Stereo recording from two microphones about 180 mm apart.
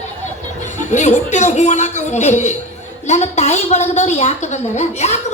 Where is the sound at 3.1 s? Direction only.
40° left (ahead or behind).